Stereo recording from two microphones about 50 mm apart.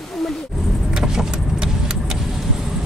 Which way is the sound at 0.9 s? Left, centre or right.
Centre.